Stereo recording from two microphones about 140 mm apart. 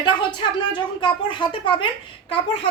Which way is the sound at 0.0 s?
35° left (ahead or behind).